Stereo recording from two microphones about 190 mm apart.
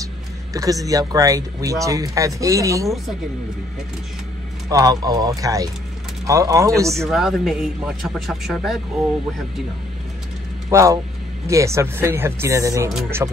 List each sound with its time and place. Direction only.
0.5 s a man's voice: 15° right (ahead or behind)
4.6 s speech: 20° right (ahead or behind)
7.1 s a man's voice: centre (ahead or behind)
10.7 s speech: 15° right (ahead or behind)